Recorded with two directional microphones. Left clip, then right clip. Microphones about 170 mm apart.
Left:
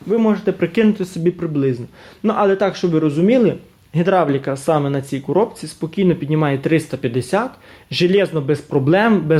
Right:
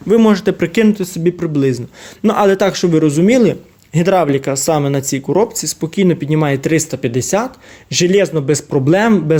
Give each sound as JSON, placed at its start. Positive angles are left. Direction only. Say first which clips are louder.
{"t": 0.1, "sound": "speech", "louder": "right 5 dB", "side_deg": -45}
{"t": 0.6, "sound": "speech", "louder": "right 3 dB", "side_deg": -20}
{"t": 2.2, "sound": "speech", "louder": "right 4 dB", "side_deg": -35}